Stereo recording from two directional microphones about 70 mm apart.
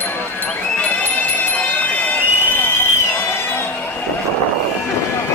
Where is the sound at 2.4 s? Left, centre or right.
Left.